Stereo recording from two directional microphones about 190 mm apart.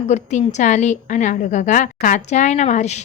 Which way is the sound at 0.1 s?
40° left (ahead or behind).